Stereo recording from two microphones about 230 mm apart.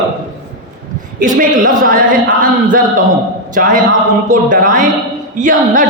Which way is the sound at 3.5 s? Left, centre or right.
Right.